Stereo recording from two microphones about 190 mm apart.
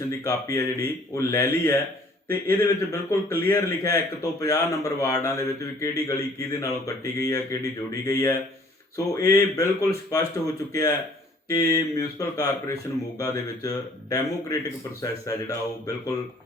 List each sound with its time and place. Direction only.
0.3 s a man's voice: 15° left (ahead or behind)